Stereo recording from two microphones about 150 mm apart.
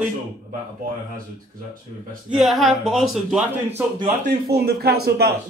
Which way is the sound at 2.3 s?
Centre (ahead or behind).